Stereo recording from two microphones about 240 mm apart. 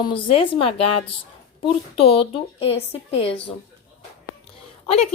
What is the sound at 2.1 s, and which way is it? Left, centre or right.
Speech, left.